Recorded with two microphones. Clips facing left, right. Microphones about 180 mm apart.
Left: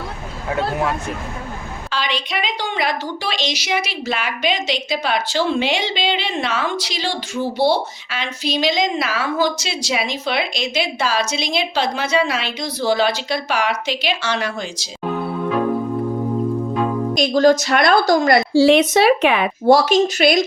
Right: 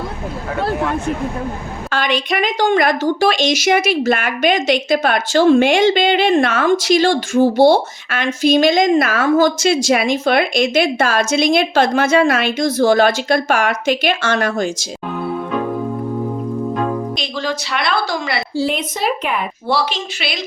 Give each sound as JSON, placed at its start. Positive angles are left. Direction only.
{"t": 1.9, "sound": "a woman's voice", "side_deg": -50}
{"t": 17.2, "sound": "a woman's voice", "side_deg": 45}
{"t": 18.5, "sound": "speech", "side_deg": 90}
{"t": 19.6, "sound": "a woman's voice", "side_deg": 45}